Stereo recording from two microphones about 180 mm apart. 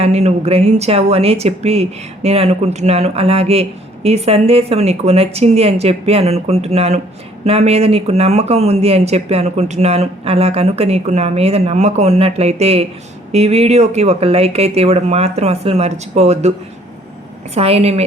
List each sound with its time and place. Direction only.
0.0 s speech: 35° right (ahead or behind)
17.5 s speech: 35° right (ahead or behind)